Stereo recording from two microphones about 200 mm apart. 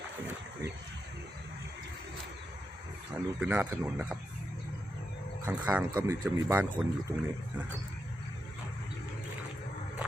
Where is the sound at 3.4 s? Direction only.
5° right (ahead or behind).